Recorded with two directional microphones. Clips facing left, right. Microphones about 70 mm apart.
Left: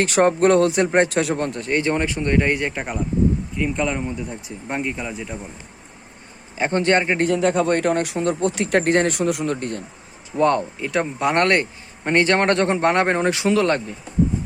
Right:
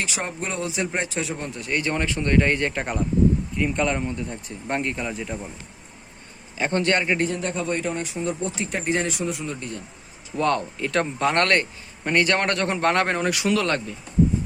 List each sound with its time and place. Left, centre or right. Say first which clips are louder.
0.0 s speech: left 13 dB; left
1.6 s speech: left 2 dB; left; by 2.8 s centre
3.6 s speech: left 1 dB; centre
6.6 s speech: left 4 dB; left
7.3 s speech: left 8 dB; left
10.3 s speech: left 4 dB; left